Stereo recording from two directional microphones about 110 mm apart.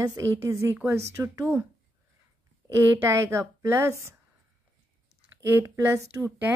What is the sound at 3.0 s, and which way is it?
A woman's voice, 25° right (ahead or behind).